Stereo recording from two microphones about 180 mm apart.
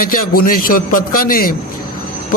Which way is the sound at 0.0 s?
55° left (ahead or behind).